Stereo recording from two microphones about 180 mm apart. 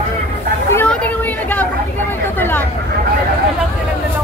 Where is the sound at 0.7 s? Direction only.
10° left (ahead or behind).